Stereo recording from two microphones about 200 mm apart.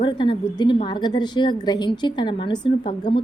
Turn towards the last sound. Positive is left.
turn(degrees=25)  # may be behind; listen again after turning